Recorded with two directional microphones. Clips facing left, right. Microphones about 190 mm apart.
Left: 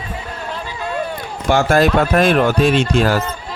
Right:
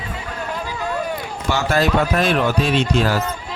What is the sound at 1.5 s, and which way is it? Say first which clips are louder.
Speech: left 5 dB; 50° left (ahead or behind).